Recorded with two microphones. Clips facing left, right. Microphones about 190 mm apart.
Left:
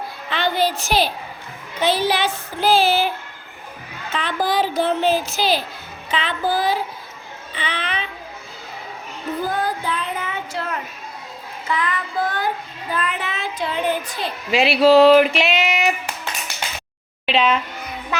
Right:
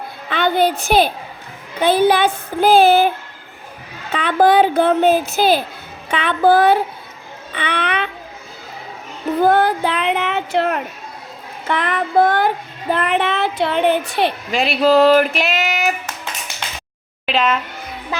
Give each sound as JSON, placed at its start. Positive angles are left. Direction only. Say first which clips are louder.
{"t": 0.3, "sound": "a woman's voice", "louder": "right 4 dB", "side_deg": -55}
{"t": 4.1, "sound": "a woman's voice", "louder": "right 8 dB", "side_deg": -60}
{"t": 9.4, "sound": "child singing", "louder": "right 10 dB", "side_deg": -65}
{"t": 11.7, "sound": "a woman's voice", "louder": "right 6 dB", "side_deg": -60}
{"t": 12.9, "sound": "child singing", "louder": "right 8 dB", "side_deg": -65}
{"t": 14.5, "sound": "speech", "louder": "left 2 dB", "side_deg": 0}
{"t": 17.2, "sound": "speech", "louder": "even", "side_deg": 0}